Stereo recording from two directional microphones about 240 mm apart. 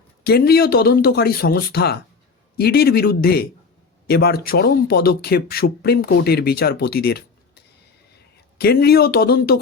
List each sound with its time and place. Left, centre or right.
0.3 s speech: left